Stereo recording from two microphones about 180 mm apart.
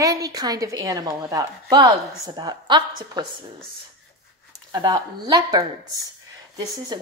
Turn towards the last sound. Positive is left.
turn(degrees=-20)  # may be behind; listen again after turning